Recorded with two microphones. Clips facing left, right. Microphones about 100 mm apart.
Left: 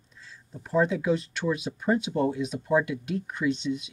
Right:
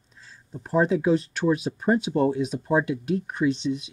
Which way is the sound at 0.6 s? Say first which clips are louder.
Right 3 dB; 35° right (ahead or behind).